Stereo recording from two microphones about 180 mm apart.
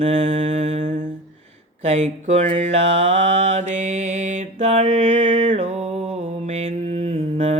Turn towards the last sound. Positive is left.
turn(degrees=-35)  # may be behind; listen again after turning